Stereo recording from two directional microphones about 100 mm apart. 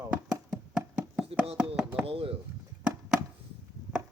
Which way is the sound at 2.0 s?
70° right (ahead or behind).